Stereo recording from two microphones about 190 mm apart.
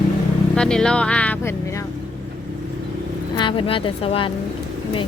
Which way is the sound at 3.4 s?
25° left (ahead or behind).